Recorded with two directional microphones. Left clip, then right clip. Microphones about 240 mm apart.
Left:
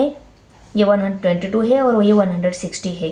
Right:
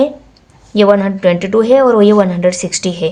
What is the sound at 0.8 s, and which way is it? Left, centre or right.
A woman's voice, right.